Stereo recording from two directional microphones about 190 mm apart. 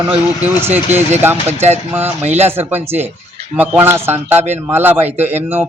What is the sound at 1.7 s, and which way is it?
A man's voice, 10° right (ahead or behind).